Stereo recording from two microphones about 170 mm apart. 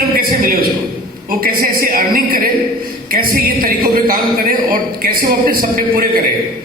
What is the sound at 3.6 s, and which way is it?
Speech, 55° right (ahead or behind).